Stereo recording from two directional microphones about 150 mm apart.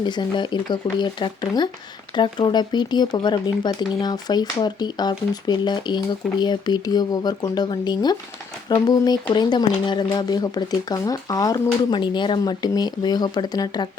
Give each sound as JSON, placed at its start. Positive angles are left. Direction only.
{"t": 0.0, "sound": "speech", "side_deg": 30}